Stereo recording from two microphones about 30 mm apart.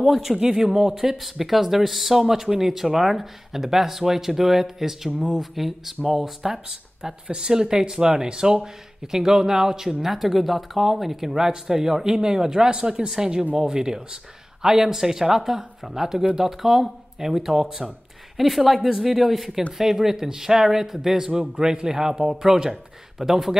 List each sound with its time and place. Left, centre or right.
0.1 s speech: centre
0.4 s speech: centre
6.7 s speech: right
10.0 s speech: centre; by 17.9 s right
18.4 s speech: centre
21.3 s speech: right